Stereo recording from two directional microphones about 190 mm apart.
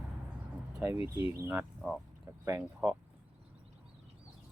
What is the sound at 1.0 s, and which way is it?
Speech, 15° right (ahead or behind).